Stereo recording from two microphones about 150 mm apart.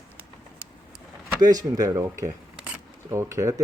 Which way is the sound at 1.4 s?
25° right (ahead or behind).